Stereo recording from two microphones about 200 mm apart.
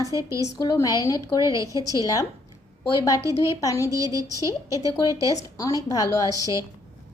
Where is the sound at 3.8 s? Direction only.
15° right (ahead or behind).